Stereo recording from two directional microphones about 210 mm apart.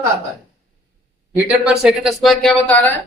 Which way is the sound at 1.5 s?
5° right (ahead or behind).